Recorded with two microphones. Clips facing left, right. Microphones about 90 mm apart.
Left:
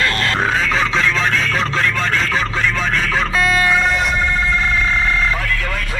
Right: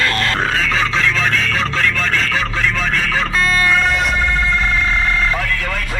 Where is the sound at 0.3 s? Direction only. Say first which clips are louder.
Left 1 dB; centre (ahead or behind).